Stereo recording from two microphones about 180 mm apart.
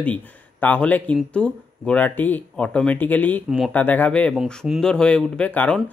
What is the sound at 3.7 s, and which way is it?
Speech, 10° left (ahead or behind).